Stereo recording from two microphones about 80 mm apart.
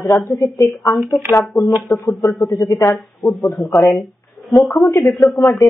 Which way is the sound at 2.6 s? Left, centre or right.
Left.